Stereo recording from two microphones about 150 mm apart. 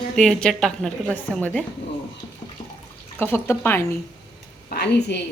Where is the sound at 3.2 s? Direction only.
15° left (ahead or behind).